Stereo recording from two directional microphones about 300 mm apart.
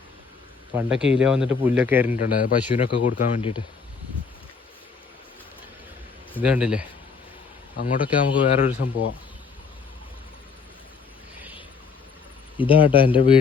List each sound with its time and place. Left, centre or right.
0.7 s speech: centre
2.1 s speech: left
6.4 s speech: centre
7.8 s speech: left
12.5 s speech: centre